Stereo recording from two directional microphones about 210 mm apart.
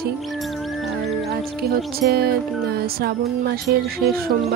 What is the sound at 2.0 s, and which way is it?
Speech, 50° right (ahead or behind).